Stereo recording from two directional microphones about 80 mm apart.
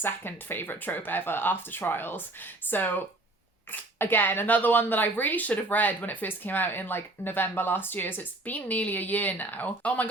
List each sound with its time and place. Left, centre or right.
0.0 s speech: left